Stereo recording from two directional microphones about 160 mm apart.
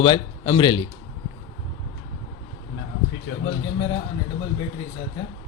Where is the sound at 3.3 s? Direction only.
90° left.